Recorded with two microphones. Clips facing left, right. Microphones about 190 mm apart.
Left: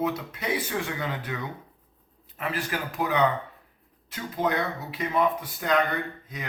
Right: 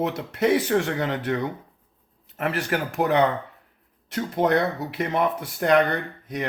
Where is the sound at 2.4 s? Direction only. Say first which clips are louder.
Right 5 dB; 70° right (ahead or behind).